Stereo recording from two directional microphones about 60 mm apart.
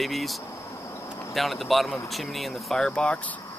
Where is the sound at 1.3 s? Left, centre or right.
Centre.